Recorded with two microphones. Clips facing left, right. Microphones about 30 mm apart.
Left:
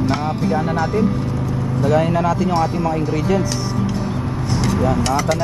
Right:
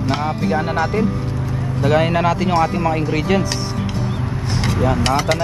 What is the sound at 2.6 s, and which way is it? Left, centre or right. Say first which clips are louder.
Speech: right 1 dB; right.